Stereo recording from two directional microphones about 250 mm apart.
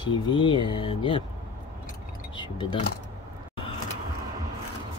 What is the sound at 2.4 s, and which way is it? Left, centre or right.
Speech, centre.